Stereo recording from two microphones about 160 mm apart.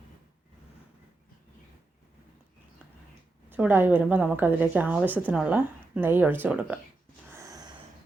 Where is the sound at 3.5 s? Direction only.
10° right (ahead or behind).